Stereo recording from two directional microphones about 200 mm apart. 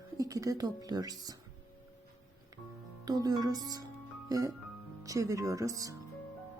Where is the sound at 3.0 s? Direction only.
20° right (ahead or behind).